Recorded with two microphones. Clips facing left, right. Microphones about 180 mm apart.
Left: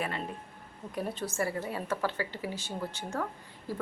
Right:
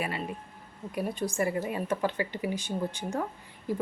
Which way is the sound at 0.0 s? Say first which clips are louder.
Right 2 dB; 10° right (ahead or behind).